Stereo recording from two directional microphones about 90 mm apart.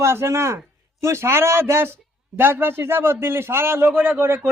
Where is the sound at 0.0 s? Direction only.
30° right (ahead or behind).